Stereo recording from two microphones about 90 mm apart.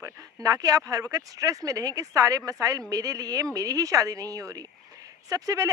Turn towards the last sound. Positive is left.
turn(degrees=-40)  # may be behind; listen again after turning